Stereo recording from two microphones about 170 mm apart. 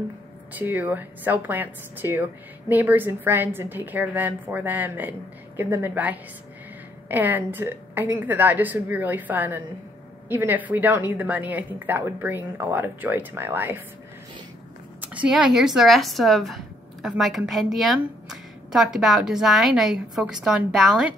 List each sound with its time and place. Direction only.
0.5 s a woman's voice: 10° right (ahead or behind)
15.0 s speech: 5° right (ahead or behind)